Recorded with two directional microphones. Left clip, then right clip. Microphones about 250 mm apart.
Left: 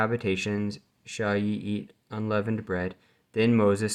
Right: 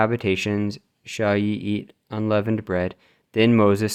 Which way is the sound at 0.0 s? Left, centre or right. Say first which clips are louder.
Right 6 dB; right.